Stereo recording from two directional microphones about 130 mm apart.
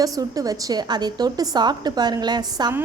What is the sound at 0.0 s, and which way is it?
A woman's voice, 25° right (ahead or behind).